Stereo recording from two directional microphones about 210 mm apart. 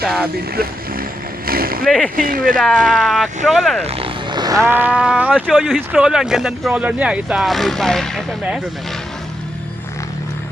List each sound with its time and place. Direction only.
0.0 s speech: centre (ahead or behind)
0.5 s speech: 45° right (ahead or behind)
1.5 s boat: 45° right (ahead or behind)
2.1 s speech: 40° right (ahead or behind)
2.6 s speech: centre (ahead or behind)
3.8 s speech: 25° right (ahead or behind); by 8.6 s centre (ahead or behind)